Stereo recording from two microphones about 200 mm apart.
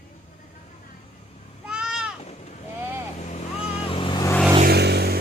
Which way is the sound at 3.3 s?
30° left (ahead or behind).